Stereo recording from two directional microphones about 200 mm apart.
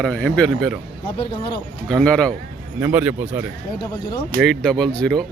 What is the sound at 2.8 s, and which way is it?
Speech, 10° right (ahead or behind).